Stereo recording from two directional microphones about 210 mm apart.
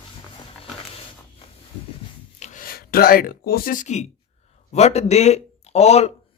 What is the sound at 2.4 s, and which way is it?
Speech, 40° left (ahead or behind).